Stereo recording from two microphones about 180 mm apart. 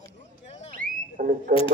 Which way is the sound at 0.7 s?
50° right (ahead or behind).